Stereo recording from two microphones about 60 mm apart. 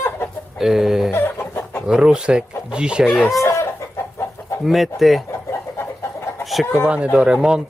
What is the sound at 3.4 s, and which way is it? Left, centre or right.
Chicken, left.